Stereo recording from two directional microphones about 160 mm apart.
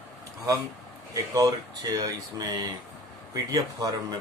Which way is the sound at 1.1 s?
20° right (ahead or behind).